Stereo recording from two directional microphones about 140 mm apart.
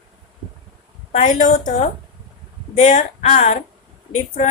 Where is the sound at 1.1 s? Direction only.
65° left (ahead or behind).